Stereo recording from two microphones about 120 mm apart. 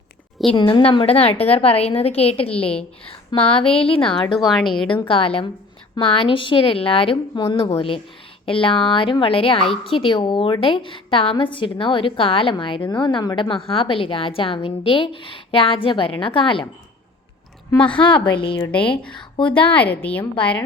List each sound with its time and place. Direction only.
0.5 s a woman's voice: 45° left (ahead or behind)
4.4 s a woman's voice: centre (ahead or behind)
5.0 s a woman's voice: 50° left (ahead or behind)
17.9 s a woman's voice: 40° left (ahead or behind)
18.6 s speech: 10° left (ahead or behind)
19.4 s a woman's voice: 45° left (ahead or behind)
19.7 s speech: 15° left (ahead or behind)